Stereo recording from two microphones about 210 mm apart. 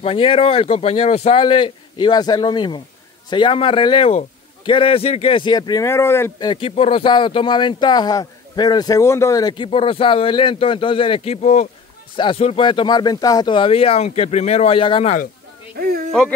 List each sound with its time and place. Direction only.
0.0 s speech: 25° left (ahead or behind)
6.5 s speech: 25° left (ahead or behind)